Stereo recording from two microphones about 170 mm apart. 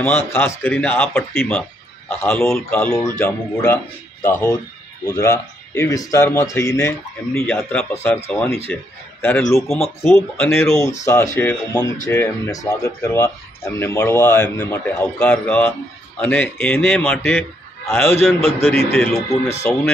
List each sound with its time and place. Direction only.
0.4 s speech: 10° left (ahead or behind)